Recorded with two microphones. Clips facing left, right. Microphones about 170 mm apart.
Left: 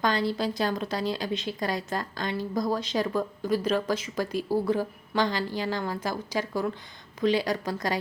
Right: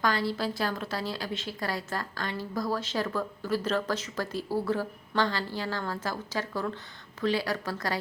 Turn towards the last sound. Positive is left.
turn(degrees=15)  # may be behind; listen again after turning